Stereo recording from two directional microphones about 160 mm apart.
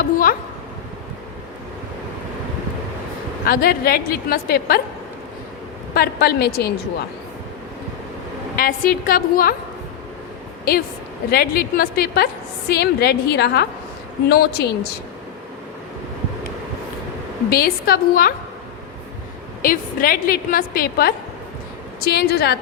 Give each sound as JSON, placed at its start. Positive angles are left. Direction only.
{"t": 0.0, "sound": "speech", "side_deg": 60}
{"t": 3.4, "sound": "a woman's voice", "side_deg": 70}
{"t": 5.9, "sound": "a woman's voice", "side_deg": 75}
{"t": 8.5, "sound": "a woman's voice", "side_deg": 65}
{"t": 11.3, "sound": "a woman's voice", "side_deg": 70}
{"t": 17.5, "sound": "a woman's voice", "side_deg": 70}
{"t": 19.6, "sound": "a woman's voice", "side_deg": 60}
{"t": 22.0, "sound": "a woman's voice", "side_deg": 90}